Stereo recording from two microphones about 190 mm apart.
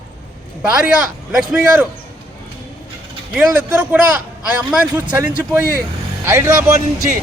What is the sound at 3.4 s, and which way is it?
A man's voice, 5° right (ahead or behind).